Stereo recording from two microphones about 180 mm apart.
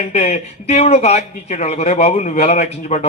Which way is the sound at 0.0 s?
35° left (ahead or behind).